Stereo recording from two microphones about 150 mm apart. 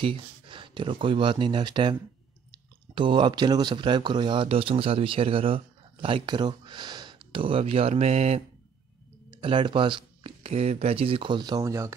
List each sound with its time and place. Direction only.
0.0 s speech: 35° right (ahead or behind)
9.3 s speech: 35° right (ahead or behind)